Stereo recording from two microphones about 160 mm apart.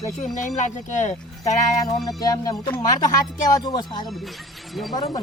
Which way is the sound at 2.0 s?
25° left (ahead or behind).